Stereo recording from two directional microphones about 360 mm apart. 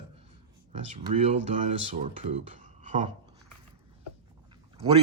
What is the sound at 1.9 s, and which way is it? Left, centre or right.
Speech, centre.